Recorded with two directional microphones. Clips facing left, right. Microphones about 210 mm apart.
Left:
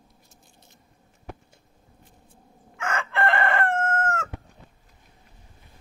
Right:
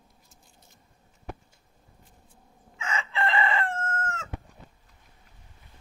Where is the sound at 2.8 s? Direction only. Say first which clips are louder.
Left 4 dB; 55° left (ahead or behind).